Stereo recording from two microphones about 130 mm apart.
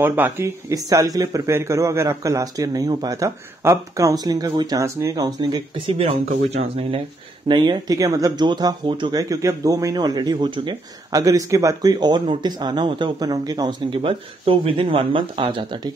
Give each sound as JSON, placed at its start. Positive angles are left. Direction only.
{"t": 0.0, "sound": "speech", "side_deg": -15}
{"t": 7.4, "sound": "speech", "side_deg": -35}
{"t": 14.0, "sound": "speech", "side_deg": -45}